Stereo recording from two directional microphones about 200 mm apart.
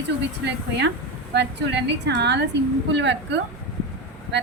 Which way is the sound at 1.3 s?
60° right (ahead or behind).